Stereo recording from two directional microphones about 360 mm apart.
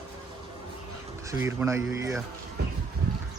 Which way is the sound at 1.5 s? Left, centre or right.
Centre.